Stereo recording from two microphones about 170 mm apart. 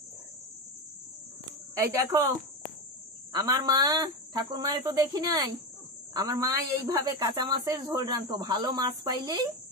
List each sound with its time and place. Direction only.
1.8 s speech: 20° right (ahead or behind)
3.3 s speech: 20° right (ahead or behind)